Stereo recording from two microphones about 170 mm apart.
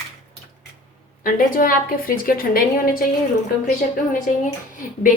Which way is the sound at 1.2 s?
55° left (ahead or behind).